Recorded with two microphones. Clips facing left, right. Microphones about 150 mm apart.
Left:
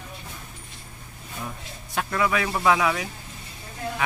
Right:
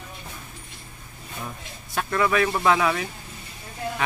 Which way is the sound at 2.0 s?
10° left (ahead or behind).